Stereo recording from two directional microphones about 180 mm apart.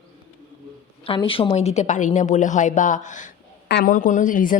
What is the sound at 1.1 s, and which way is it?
A woman's voice, 30° left (ahead or behind).